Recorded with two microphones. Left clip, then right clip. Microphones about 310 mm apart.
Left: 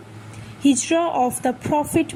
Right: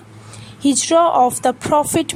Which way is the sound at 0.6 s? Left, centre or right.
Right.